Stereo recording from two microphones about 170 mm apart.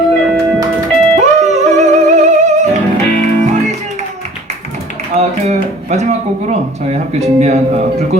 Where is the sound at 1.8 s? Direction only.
40° right (ahead or behind).